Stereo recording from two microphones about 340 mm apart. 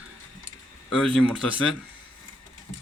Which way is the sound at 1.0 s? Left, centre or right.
Centre.